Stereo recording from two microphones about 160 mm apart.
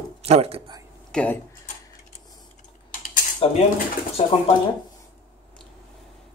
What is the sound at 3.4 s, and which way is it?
Speech, 40° left (ahead or behind).